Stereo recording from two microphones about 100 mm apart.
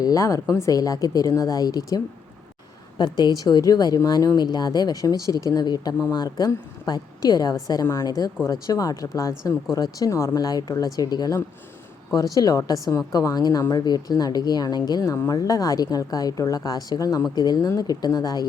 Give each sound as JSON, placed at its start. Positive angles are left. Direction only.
{"t": 0.0, "sound": "speech", "side_deg": 35}
{"t": 3.0, "sound": "speech", "side_deg": 45}